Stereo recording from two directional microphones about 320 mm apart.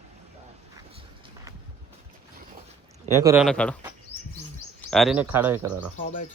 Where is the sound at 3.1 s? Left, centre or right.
Centre.